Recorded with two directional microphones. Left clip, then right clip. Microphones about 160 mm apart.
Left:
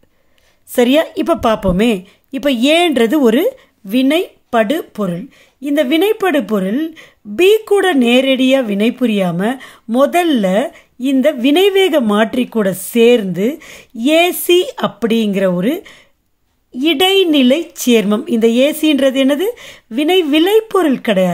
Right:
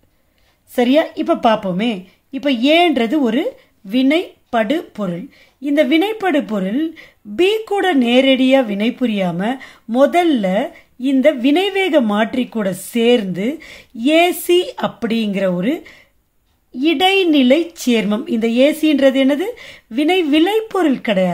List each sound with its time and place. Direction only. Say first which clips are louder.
0.7 s a woman's voice: left 2 dB; 45° left (ahead or behind)